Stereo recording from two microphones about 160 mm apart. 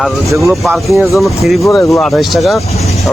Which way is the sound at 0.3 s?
Centre (ahead or behind).